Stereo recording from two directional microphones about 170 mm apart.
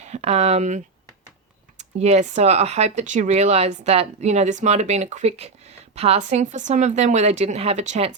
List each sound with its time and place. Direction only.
0.0 s speech: 40° right (ahead or behind)
1.8 s speech: 40° right (ahead or behind)